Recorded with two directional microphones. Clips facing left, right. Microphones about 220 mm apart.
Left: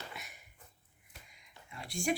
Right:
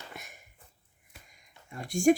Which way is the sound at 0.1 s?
45° right (ahead or behind).